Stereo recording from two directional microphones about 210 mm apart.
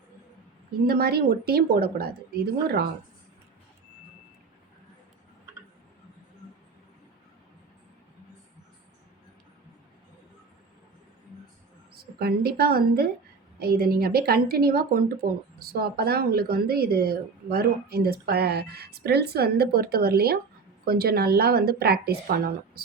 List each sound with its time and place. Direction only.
0.9 s speech: 50° right (ahead or behind)
12.2 s speech: 45° right (ahead or behind)